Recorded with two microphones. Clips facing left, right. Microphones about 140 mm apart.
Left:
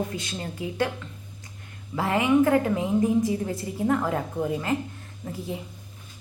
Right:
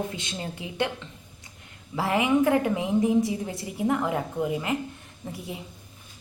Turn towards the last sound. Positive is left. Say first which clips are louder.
# left 3 dB
turn(degrees=-20)  # may be behind; listen again after turning